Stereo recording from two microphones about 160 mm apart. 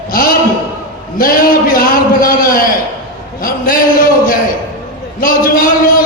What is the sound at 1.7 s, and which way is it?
A man's voice, 65° left (ahead or behind).